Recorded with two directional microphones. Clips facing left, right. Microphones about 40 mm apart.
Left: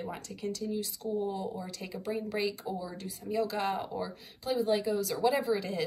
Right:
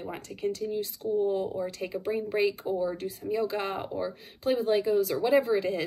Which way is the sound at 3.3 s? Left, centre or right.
Right.